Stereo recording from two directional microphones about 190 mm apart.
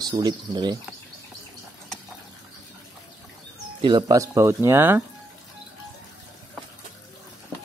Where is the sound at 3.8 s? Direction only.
25° right (ahead or behind).